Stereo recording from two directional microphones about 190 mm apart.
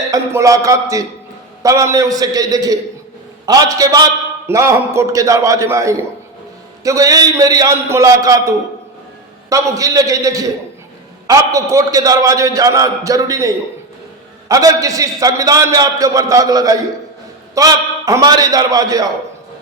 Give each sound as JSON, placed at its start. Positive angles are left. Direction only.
{"t": 0.1, "sound": "a man's voice", "side_deg": -15}